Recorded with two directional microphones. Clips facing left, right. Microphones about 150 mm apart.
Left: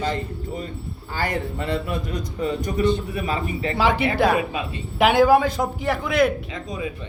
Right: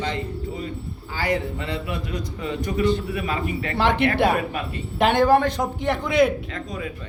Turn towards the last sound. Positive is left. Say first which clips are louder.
# left 1 dB
turn(degrees=15)  # may be behind; listen again after turning